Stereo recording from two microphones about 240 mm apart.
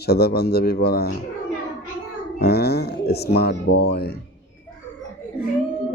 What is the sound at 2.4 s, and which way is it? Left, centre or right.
A man's voice, left.